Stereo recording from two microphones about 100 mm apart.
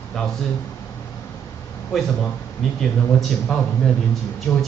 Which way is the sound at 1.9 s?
Centre (ahead or behind).